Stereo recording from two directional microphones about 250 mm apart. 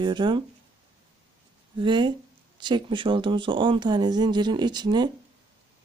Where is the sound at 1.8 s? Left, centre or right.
Centre.